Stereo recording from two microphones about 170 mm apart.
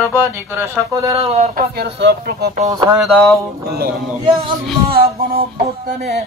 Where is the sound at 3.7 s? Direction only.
65° right (ahead or behind).